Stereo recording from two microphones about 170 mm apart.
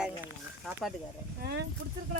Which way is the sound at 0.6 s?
Centre (ahead or behind).